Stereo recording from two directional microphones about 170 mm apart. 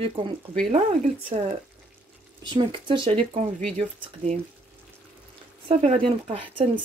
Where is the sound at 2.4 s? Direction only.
25° right (ahead or behind).